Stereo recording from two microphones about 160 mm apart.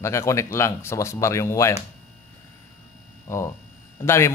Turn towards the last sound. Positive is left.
turn(degrees=15)  # may be behind; listen again after turning